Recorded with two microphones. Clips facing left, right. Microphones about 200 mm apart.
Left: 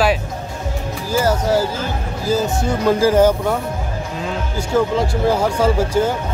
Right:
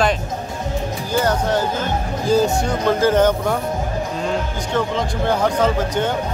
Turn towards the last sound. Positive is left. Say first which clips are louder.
# left 3 dB
turn(degrees=10)  # may be behind; listen again after turning